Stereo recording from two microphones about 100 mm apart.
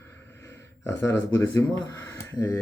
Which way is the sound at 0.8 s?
25° left (ahead or behind).